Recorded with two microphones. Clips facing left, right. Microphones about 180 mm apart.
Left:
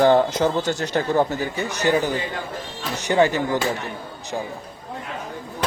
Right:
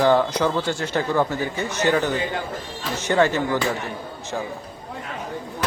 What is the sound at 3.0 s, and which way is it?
Speech, 15° left (ahead or behind).